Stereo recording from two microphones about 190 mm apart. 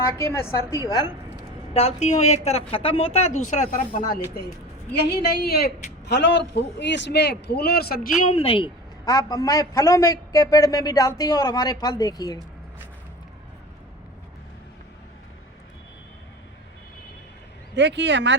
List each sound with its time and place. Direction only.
0.0 s a woman's voice: 15° left (ahead or behind)
1.7 s a woman's voice: 35° left (ahead or behind)
4.9 s a woman's voice: 60° left (ahead or behind)
6.1 s speech: 65° left (ahead or behind); by 12.4 s 20° left (ahead or behind)
17.7 s speech: 65° right (ahead or behind)